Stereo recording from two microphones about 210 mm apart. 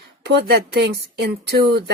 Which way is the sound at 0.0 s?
50° right (ahead or behind).